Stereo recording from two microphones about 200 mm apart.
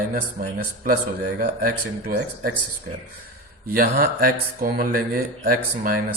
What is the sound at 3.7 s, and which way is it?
Speech, 50° right (ahead or behind).